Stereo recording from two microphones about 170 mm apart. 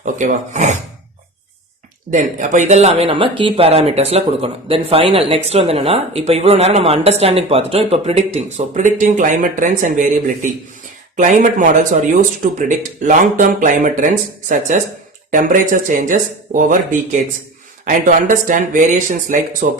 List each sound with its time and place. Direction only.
0.0 s speech: 45° right (ahead or behind)
2.0 s speech: 50° right (ahead or behind)